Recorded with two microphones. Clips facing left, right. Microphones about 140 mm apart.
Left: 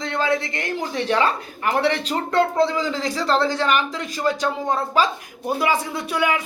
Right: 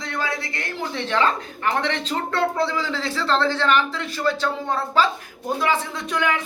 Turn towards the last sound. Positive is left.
turn(degrees=10)  # may be behind; listen again after turning